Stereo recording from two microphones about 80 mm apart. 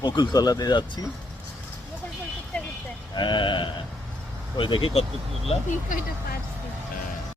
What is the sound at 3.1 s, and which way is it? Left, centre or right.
Speech, left.